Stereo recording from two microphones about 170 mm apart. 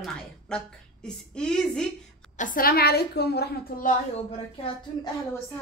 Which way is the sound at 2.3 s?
50° left (ahead or behind).